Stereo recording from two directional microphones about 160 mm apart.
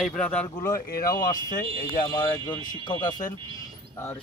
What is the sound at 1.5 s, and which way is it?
Speech, 55° left (ahead or behind).